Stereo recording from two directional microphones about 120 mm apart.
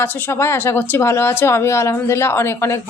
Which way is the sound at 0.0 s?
20° left (ahead or behind).